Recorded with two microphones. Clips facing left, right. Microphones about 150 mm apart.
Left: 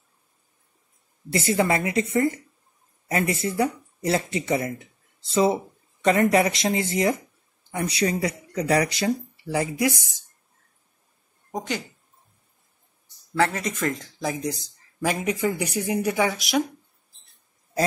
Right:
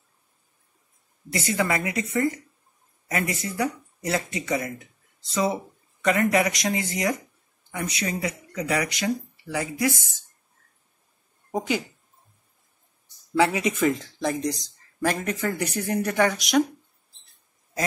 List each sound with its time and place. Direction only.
1.3 s speech: 30° left (ahead or behind)
11.5 s speech: 10° right (ahead or behind)
13.4 s speech: 10° right (ahead or behind)